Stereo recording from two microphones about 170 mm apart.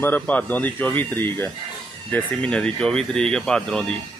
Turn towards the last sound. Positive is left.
turn(degrees=5)  # may be behind; listen again after turning